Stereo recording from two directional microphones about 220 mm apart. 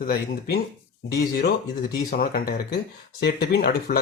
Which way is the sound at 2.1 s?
45° left (ahead or behind).